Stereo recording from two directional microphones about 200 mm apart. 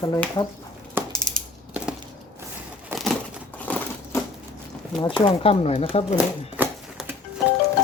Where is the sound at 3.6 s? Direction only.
10° left (ahead or behind).